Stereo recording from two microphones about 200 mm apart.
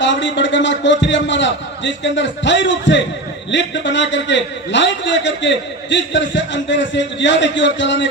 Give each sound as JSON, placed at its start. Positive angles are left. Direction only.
{"t": 0.0, "sound": "a man's voice", "side_deg": 65}